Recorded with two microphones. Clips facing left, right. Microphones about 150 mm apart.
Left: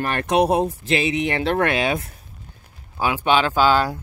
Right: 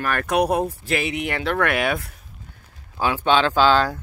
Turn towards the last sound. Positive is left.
turn(degrees=10)  # may be behind; listen again after turning